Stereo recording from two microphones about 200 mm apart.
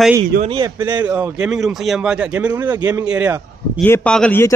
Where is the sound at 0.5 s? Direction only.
20° right (ahead or behind).